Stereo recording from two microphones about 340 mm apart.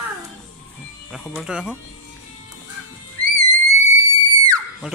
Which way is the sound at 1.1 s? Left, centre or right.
Centre.